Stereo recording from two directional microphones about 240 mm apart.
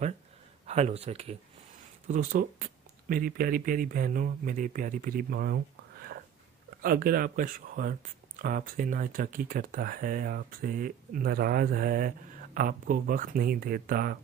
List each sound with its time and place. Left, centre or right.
0.7 s speech: right